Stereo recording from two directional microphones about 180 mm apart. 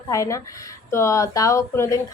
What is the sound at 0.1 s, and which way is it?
A woman's voice, 15° left (ahead or behind).